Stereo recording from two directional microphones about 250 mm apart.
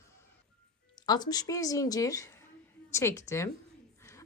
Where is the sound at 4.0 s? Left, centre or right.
Centre.